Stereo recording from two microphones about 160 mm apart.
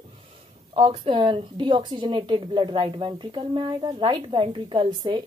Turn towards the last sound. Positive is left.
turn(degrees=-30)  # may be behind; listen again after turning